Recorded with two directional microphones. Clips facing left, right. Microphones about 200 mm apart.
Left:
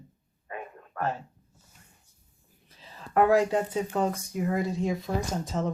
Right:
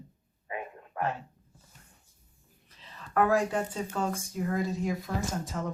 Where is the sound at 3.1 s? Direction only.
20° left (ahead or behind).